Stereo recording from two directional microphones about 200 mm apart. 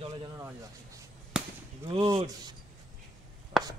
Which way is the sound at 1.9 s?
25° right (ahead or behind).